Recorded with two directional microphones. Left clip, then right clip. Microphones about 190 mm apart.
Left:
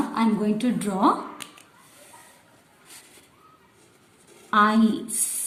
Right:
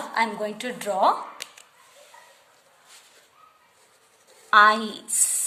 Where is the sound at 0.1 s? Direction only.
30° right (ahead or behind).